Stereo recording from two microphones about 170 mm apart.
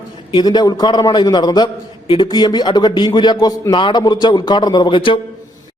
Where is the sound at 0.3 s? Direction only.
25° left (ahead or behind).